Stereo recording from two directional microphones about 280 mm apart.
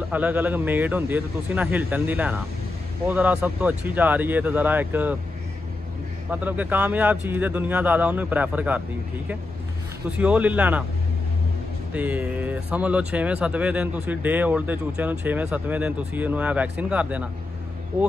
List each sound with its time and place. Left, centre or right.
0.1 s speech: centre
6.3 s speech: centre
10.0 s speech: centre
11.9 s speech: centre